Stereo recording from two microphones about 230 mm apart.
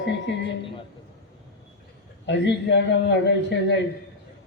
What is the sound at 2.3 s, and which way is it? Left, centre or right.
A man's voice, left.